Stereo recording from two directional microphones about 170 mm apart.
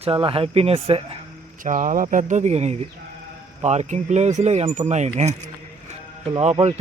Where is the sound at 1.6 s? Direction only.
50° right (ahead or behind).